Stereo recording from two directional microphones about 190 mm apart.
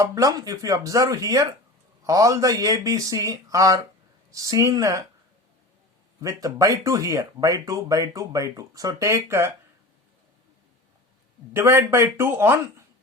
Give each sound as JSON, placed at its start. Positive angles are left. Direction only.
{"t": 0.0, "sound": "speech", "side_deg": -15}
{"t": 6.2, "sound": "speech", "side_deg": -20}
{"t": 11.5, "sound": "speech", "side_deg": -15}